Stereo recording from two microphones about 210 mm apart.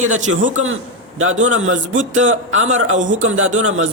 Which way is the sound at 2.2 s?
70° right (ahead or behind).